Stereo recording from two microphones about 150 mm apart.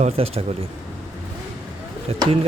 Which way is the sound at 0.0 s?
40° right (ahead or behind).